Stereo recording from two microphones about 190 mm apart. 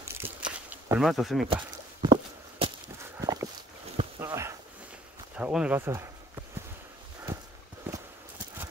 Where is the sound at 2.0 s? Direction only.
25° right (ahead or behind).